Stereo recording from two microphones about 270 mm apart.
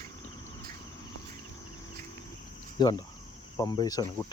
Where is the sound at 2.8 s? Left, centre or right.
Centre.